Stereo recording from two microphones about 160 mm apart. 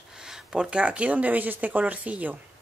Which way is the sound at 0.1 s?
5° right (ahead or behind).